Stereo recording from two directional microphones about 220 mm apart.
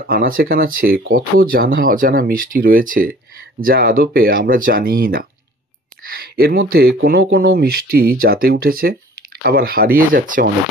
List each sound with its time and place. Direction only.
0.0 s speech: 40° right (ahead or behind)